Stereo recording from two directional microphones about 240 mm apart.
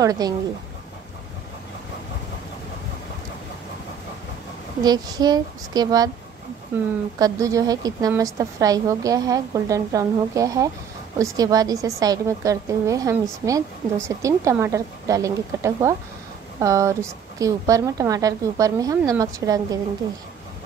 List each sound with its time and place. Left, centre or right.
0.0 s a woman's voice: centre
4.8 s a woman's voice: centre